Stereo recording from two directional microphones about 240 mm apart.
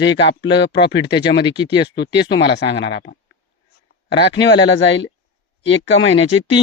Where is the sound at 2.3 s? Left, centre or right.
Left.